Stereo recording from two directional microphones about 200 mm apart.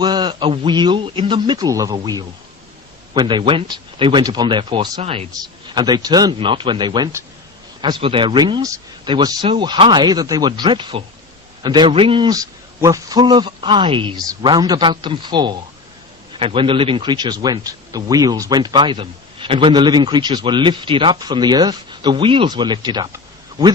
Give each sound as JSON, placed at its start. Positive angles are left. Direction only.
{"t": 0.0, "sound": "speech", "side_deg": -20}